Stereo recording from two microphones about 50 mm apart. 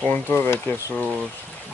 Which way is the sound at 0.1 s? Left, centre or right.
Left.